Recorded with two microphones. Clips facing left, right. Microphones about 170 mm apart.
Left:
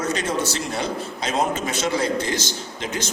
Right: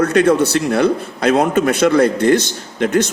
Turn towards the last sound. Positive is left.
turn(degrees=-60)  # may be behind; listen again after turning